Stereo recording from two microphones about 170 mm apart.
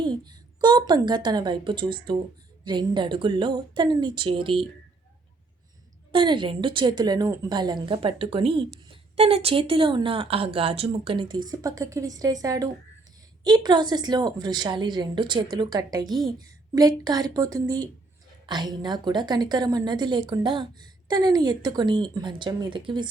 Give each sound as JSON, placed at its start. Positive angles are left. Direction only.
{"t": 0.0, "sound": "a woman's voice", "side_deg": -25}
{"t": 6.1, "sound": "a woman's voice", "side_deg": -30}